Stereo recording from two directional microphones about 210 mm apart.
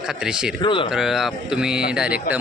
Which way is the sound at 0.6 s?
25° left (ahead or behind).